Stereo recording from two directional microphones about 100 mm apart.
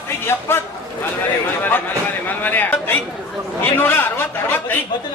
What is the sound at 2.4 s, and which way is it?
A man's voice, 15° left (ahead or behind).